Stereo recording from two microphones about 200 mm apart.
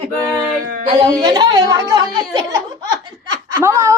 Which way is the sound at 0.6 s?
45° right (ahead or behind).